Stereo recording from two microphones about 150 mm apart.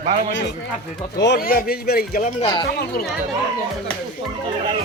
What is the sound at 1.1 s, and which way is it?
Speech, 80° left.